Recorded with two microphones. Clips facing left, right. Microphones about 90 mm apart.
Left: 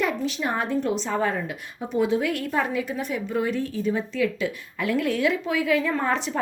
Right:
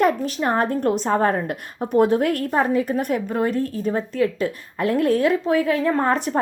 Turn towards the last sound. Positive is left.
turn(degrees=-50)  # may be behind; listen again after turning